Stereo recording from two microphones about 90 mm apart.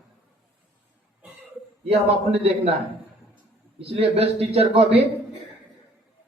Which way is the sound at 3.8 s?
90° right.